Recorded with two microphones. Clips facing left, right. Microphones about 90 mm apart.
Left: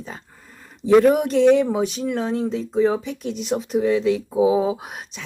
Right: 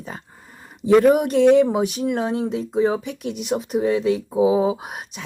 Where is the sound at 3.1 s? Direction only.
55° right (ahead or behind).